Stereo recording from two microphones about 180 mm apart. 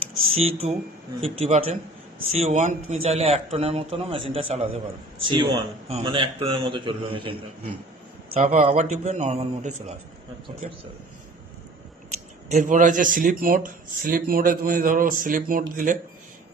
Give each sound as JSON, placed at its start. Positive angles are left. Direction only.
{"t": 0.3, "sound": "a man's voice", "side_deg": -35}
{"t": 8.3, "sound": "a man's voice", "side_deg": -45}
{"t": 12.5, "sound": "speech", "side_deg": -45}